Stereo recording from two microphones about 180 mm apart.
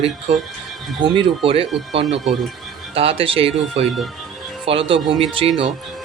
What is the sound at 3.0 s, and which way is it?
Speech, 30° right (ahead or behind).